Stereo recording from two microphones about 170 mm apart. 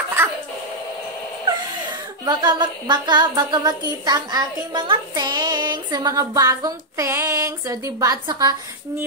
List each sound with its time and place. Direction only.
2.2 s a woman's voice: 25° right (ahead or behind)